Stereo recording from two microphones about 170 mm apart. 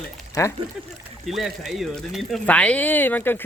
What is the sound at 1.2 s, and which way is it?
Speech, centre (ahead or behind).